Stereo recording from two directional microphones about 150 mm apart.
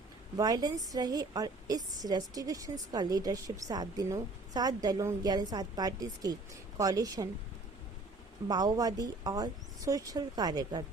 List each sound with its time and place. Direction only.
0.3 s a woman's voice: 25° right (ahead or behind)
8.4 s a woman's voice: 25° right (ahead or behind)